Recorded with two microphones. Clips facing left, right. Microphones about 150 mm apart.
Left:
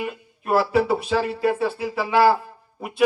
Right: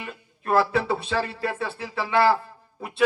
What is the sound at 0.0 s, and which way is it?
Speech, 10° left (ahead or behind).